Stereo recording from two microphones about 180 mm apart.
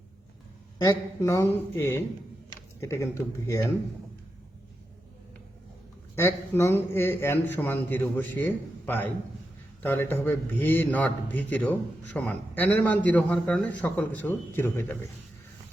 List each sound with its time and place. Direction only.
0.9 s a man's voice: 15° left (ahead or behind)
6.1 s a man's voice: 15° left (ahead or behind)